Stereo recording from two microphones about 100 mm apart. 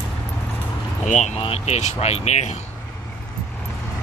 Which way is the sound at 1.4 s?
80° left.